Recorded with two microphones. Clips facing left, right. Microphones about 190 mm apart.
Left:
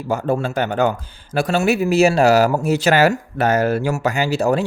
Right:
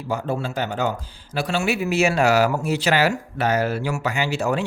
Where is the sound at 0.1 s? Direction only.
45° left (ahead or behind).